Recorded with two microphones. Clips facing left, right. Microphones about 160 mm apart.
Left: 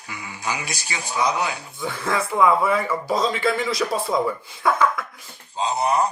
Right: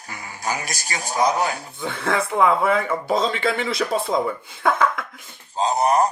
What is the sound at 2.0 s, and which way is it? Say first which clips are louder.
Speech: even; 30° right (ahead or behind).